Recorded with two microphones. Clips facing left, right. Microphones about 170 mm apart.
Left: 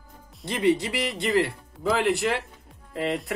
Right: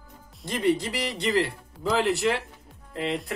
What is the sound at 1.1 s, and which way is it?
Speech, centre (ahead or behind).